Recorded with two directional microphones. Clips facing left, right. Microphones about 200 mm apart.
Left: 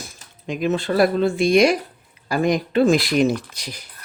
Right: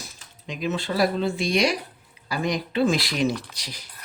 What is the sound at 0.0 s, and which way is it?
Speech, 50° left (ahead or behind).